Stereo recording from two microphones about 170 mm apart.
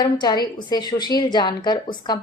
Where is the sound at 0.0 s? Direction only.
25° left (ahead or behind).